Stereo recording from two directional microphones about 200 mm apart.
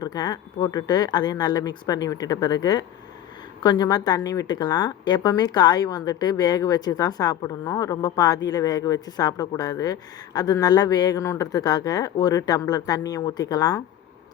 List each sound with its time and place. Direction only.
0.0 s a woman's voice: 20° left (ahead or behind)